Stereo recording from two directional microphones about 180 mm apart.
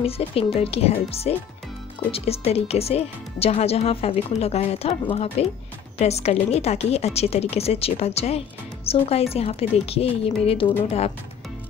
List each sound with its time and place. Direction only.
0.0 s a woman's voice: 30° left (ahead or behind)